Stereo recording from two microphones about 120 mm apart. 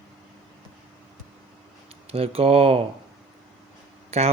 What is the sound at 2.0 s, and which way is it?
Speech, 55° right (ahead or behind).